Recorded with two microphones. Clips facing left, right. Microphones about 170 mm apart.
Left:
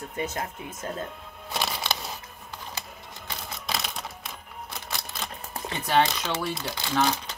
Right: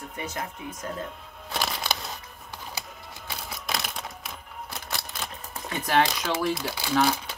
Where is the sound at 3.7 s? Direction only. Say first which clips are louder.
Even; centre (ahead or behind).